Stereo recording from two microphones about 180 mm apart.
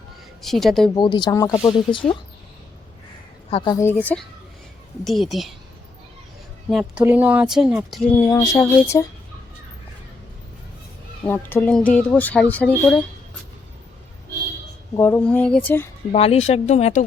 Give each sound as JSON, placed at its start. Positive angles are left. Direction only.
{"t": 0.4, "sound": "speech", "side_deg": 0}
{"t": 0.9, "sound": "speech", "side_deg": 25}
{"t": 3.5, "sound": "speech", "side_deg": 25}
{"t": 3.9, "sound": "speech", "side_deg": 5}
{"t": 6.7, "sound": "speech", "side_deg": 0}
{"t": 8.2, "sound": "speech", "side_deg": 20}
{"t": 11.3, "sound": "speech", "side_deg": 10}
{"t": 14.9, "sound": "speech", "side_deg": 10}
{"t": 16.1, "sound": "speech", "side_deg": 35}